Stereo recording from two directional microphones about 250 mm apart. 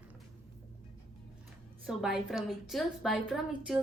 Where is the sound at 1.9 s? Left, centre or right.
Centre.